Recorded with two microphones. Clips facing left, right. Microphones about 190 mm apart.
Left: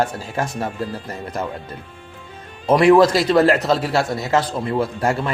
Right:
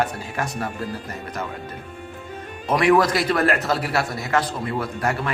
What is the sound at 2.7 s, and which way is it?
A man's voice, 25° left (ahead or behind).